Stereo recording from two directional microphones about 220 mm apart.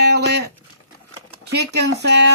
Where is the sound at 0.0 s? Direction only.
50° right (ahead or behind).